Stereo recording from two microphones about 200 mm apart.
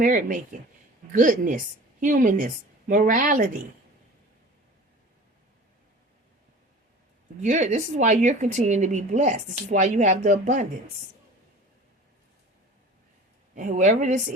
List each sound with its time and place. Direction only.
0.0 s a woman's voice: 40° right (ahead or behind)
7.4 s a woman's voice: 40° right (ahead or behind)
13.6 s a woman's voice: 40° right (ahead or behind)